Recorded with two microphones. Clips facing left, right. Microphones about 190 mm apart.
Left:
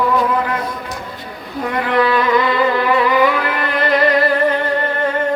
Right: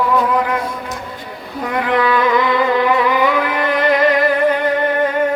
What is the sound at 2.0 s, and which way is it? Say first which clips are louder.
Music: left 2 dB; 15° right (ahead or behind).